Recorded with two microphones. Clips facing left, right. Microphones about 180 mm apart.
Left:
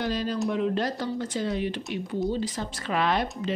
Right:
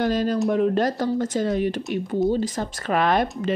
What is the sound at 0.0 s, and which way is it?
Speech, 45° right (ahead or behind).